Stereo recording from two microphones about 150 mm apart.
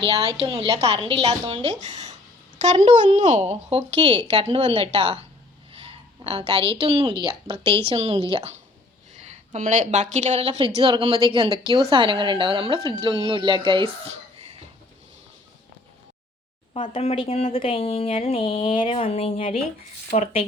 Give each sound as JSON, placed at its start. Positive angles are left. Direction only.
{"t": 0.0, "sound": "a woman's voice", "side_deg": -40}
{"t": 9.1, "sound": "a woman's voice", "side_deg": -50}
{"t": 10.8, "sound": "a woman's voice", "side_deg": -35}
{"t": 16.7, "sound": "speech", "side_deg": 35}